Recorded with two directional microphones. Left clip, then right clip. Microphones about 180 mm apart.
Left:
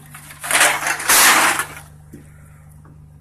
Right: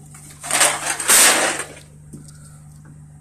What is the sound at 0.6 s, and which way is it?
Crushing, 20° right (ahead or behind).